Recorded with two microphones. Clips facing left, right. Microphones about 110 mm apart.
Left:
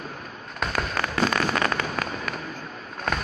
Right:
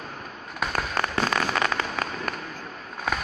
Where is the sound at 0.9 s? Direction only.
15° right (ahead or behind).